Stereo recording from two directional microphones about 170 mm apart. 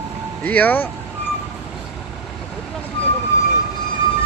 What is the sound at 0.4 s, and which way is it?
Speech, 10° left (ahead or behind).